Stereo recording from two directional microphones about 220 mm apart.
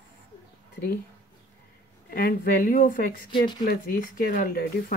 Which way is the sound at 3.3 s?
20° left (ahead or behind).